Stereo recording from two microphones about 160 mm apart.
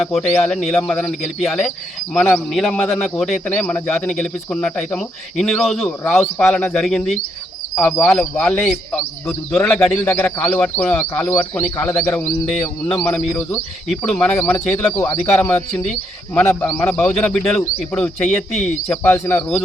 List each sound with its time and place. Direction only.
0.1 s speech: 5° left (ahead or behind)
13.1 s speech: 5° left (ahead or behind); by 15.2 s 20° left (ahead or behind)
15.4 s speech: 5° left (ahead or behind)